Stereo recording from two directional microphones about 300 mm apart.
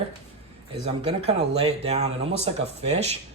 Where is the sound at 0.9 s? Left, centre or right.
Right.